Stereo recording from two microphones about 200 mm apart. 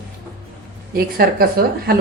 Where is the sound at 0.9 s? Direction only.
50° right (ahead or behind).